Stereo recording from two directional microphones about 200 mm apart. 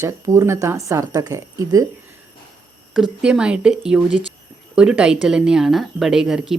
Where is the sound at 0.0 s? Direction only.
15° right (ahead or behind).